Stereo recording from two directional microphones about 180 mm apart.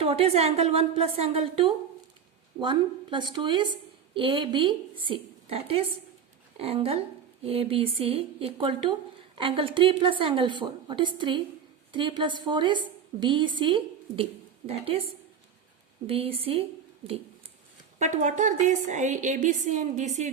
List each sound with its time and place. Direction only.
0.0 s a woman's voice: 35° right (ahead or behind)
16.0 s a woman's voice: 30° right (ahead or behind)
18.0 s a woman's voice: 40° right (ahead or behind)